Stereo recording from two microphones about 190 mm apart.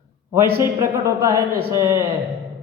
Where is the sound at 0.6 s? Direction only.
15° right (ahead or behind).